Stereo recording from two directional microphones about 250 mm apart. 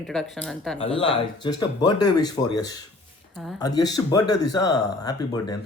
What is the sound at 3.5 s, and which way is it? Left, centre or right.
Speech, centre.